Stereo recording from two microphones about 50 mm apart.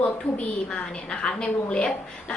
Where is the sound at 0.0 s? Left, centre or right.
Left.